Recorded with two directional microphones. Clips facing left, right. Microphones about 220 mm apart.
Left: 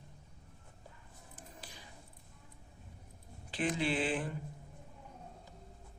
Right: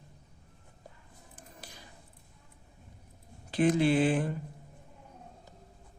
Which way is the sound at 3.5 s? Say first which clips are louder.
Right 9 dB; 45° right (ahead or behind).